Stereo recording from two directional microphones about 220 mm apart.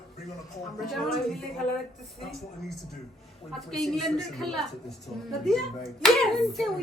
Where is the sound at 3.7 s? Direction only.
Centre (ahead or behind).